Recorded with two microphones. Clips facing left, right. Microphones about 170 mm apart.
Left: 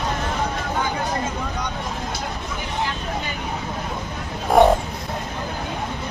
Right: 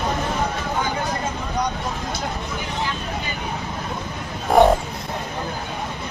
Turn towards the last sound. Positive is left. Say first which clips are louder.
# even
turn(degrees=0)  # may be behind; listen again after turning